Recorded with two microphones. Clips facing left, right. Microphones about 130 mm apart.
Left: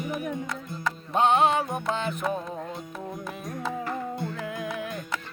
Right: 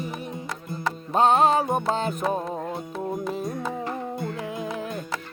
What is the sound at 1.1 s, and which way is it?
Music, 40° right (ahead or behind).